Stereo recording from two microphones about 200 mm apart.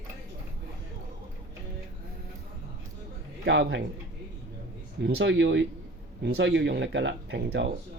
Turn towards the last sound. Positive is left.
turn(degrees=-60)  # may be behind; listen again after turning